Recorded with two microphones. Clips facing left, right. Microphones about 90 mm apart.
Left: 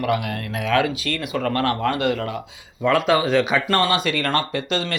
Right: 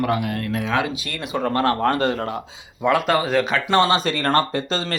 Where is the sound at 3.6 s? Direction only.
20° right (ahead or behind).